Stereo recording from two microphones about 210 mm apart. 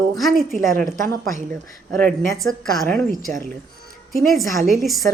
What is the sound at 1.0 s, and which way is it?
Speech, 45° right (ahead or behind).